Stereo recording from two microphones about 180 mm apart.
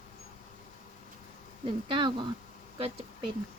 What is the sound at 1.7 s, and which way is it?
Speech, 25° right (ahead or behind).